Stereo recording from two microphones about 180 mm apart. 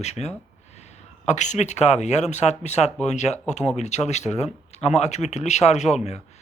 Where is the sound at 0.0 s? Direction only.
35° left (ahead or behind).